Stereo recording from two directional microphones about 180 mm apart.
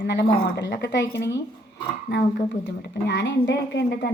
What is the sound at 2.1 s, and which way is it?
A woman's voice, 75° left (ahead or behind).